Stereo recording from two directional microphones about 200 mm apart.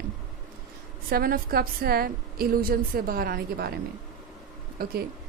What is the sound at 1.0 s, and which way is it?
A woman's voice, 45° right (ahead or behind).